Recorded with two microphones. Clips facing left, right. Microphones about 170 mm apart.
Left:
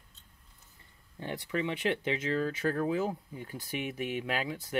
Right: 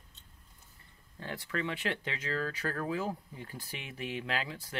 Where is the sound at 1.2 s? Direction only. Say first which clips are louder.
Left 3 dB; 20° left (ahead or behind).